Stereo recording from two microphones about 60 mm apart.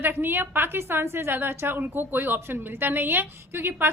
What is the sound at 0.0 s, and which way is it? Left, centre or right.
A woman's voice, right.